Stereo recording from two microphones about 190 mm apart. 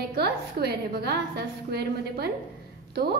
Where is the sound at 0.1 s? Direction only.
55° right (ahead or behind).